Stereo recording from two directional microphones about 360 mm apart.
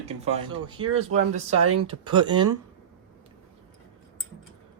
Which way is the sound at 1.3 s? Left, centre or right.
Right.